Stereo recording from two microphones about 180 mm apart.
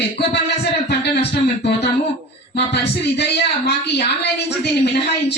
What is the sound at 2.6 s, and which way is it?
A man's voice, 65° left (ahead or behind).